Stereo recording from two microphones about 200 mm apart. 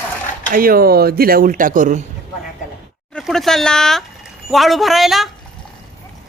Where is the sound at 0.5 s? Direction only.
45° right (ahead or behind).